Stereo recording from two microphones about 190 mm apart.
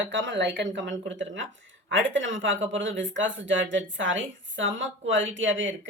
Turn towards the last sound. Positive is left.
turn(degrees=-80)